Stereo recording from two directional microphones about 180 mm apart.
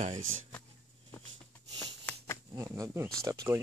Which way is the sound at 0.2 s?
90° right.